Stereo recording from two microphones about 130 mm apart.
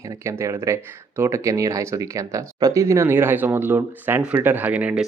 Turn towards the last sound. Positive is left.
turn(degrees=-10)  # may be behind; listen again after turning